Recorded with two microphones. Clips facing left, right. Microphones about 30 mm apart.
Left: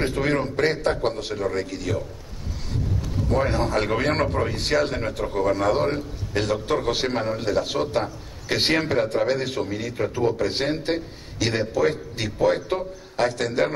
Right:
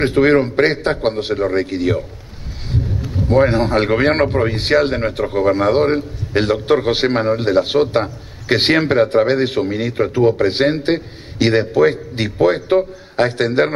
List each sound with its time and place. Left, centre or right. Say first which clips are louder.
0.0 s speech: right 10 dB; right